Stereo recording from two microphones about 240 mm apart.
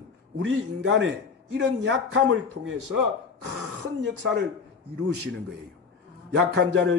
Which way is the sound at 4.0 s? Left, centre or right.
Right.